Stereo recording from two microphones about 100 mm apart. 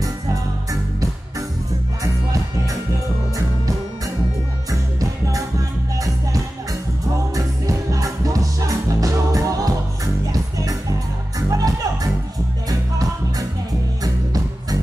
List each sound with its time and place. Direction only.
7.3 s music: 35° right (ahead or behind)